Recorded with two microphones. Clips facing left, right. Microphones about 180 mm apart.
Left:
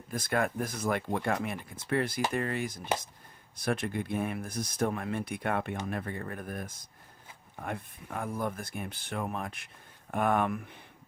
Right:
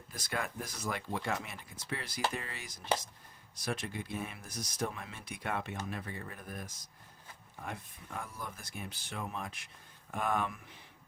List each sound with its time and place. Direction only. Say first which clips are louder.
0.1 s speech: left 9 dB; 55° left (ahead or behind)